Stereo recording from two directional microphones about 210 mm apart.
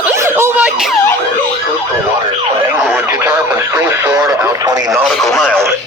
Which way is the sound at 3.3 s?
20° right (ahead or behind).